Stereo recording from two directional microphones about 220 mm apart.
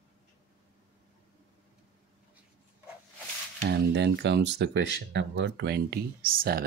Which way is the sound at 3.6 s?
50° right (ahead or behind).